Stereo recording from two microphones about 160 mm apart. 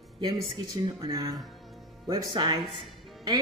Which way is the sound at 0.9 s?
20° right (ahead or behind).